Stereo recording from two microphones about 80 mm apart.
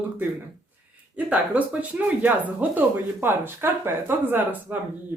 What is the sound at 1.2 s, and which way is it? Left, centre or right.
Speech, centre.